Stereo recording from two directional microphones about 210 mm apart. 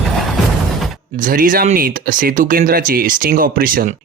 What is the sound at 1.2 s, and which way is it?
Speech, 40° right (ahead or behind).